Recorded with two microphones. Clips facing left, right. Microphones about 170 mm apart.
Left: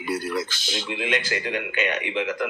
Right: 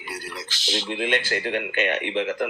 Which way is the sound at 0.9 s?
50° right (ahead or behind).